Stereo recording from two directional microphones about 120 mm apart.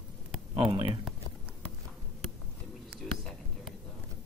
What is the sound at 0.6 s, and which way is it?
Speech, 50° right (ahead or behind).